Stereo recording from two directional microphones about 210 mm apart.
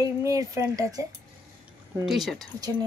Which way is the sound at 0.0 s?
15° right (ahead or behind).